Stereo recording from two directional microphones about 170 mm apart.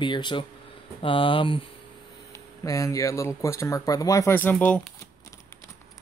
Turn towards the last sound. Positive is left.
turn(degrees=10)  # may be behind; listen again after turning